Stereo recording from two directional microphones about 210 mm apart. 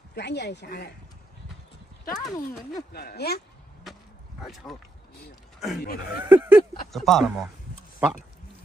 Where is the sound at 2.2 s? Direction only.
Centre (ahead or behind).